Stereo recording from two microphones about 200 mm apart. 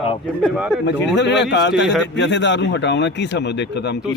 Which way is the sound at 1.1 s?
60° left (ahead or behind).